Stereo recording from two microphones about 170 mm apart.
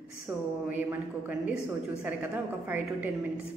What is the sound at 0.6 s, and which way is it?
Speech, 10° right (ahead or behind).